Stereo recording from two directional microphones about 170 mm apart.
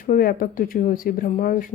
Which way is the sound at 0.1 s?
55° left (ahead or behind).